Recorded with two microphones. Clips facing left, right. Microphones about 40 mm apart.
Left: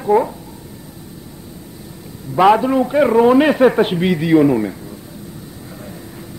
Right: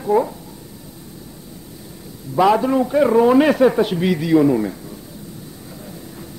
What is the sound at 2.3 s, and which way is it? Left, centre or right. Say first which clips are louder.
Speech: left 3 dB; left.